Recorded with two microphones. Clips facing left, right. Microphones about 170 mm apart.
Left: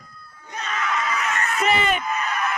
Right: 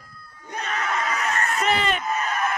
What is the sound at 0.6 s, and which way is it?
Crowd, 40° right (ahead or behind).